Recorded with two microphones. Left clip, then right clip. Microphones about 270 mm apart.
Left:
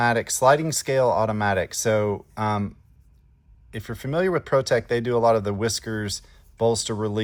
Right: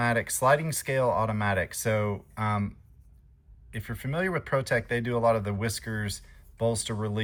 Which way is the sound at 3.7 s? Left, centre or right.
Centre.